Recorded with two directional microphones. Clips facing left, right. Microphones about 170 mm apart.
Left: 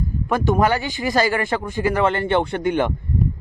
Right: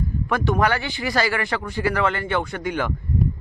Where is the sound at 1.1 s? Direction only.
20° left (ahead or behind).